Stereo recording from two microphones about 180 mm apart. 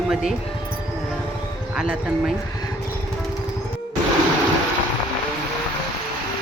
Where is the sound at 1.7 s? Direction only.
5° right (ahead or behind).